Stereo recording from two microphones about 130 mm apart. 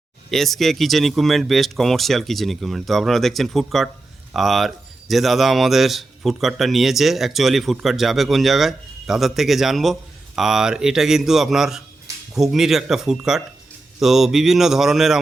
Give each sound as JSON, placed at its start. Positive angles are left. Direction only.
{"t": 0.3, "sound": "a man's voice", "side_deg": 0}